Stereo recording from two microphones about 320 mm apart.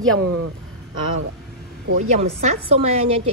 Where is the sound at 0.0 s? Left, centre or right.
Right.